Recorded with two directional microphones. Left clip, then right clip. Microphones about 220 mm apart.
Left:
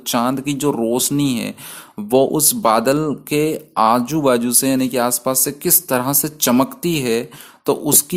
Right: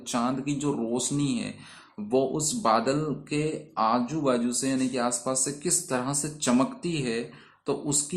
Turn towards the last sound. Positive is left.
turn(degrees=50)  # may be behind; listen again after turning